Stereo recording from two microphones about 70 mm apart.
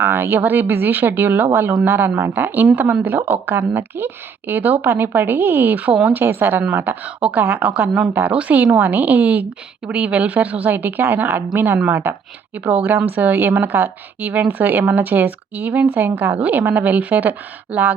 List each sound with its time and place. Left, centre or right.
0.0 s a woman's voice: right
3.2 s speech: right
3.8 s a woman's voice: right